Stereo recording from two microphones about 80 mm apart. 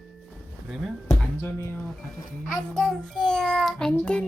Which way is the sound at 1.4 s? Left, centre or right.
Left.